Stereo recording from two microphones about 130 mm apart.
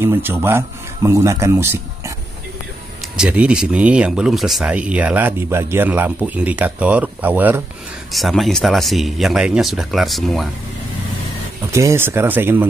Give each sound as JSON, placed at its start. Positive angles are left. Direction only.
{"t": 0.0, "sound": "speech", "side_deg": -15}
{"t": 3.0, "sound": "speech", "side_deg": -10}
{"t": 8.1, "sound": "speech", "side_deg": 0}
{"t": 11.7, "sound": "speech", "side_deg": -20}